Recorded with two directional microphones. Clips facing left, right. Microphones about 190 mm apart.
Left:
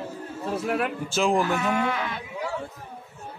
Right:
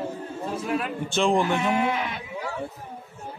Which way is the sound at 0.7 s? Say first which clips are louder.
Left 1 dB; 60° left (ahead or behind).